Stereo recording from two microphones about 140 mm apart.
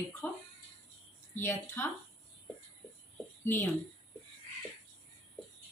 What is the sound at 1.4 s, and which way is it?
Speech, 15° left (ahead or behind).